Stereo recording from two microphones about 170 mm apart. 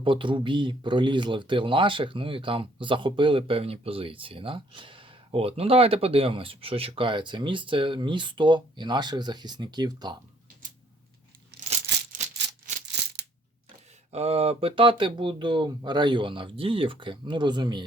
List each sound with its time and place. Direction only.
0.0 s speech: 30° right (ahead or behind)
12.1 s music: 45° right (ahead or behind)
14.1 s speech: 40° right (ahead or behind)